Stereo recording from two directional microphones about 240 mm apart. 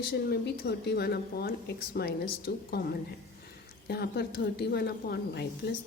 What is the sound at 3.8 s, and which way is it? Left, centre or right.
Speech, left.